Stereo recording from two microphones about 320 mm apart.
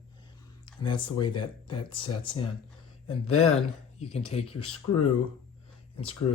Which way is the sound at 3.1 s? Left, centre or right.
Left.